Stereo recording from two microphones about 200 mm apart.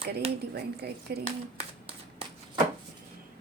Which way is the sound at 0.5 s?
55° right (ahead or behind).